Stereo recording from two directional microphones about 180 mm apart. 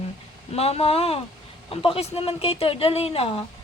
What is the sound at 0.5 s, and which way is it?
A woman's voice, 35° left (ahead or behind).